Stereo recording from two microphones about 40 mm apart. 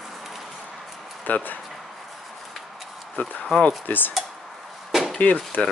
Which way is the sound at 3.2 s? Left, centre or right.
Left.